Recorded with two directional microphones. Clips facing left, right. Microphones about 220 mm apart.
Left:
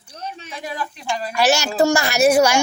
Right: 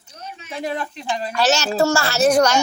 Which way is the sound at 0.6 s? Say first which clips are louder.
Right 4 dB; 25° right (ahead or behind).